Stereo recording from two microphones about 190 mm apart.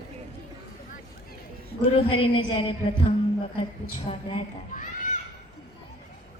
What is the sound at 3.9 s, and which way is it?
A child's voice, 35° left (ahead or behind).